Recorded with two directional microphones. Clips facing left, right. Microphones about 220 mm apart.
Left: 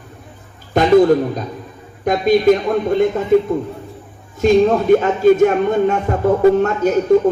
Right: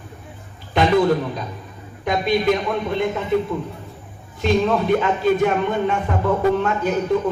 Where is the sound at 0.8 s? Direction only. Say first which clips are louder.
Left 3 dB; 45° left (ahead or behind).